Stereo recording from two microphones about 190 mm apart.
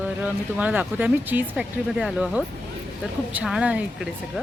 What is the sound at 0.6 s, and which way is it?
A woman's voice, 10° right (ahead or behind).